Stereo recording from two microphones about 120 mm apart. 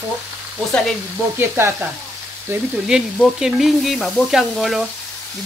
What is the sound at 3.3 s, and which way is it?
Speech, 5° right (ahead or behind).